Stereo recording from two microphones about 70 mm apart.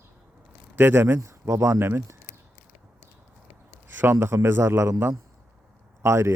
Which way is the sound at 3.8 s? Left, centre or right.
Right.